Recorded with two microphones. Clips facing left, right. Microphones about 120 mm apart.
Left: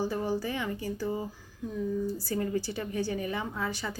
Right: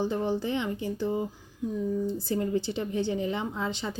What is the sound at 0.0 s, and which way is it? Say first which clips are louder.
A woman's voice: right 2 dB; 20° right (ahead or behind).